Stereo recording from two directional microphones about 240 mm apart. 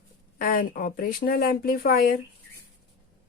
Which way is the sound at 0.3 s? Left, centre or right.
Left.